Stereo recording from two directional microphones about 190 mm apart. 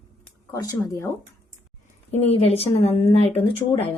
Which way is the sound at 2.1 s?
30° left (ahead or behind).